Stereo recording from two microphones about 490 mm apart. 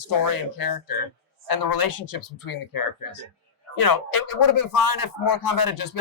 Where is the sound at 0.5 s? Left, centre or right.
Left.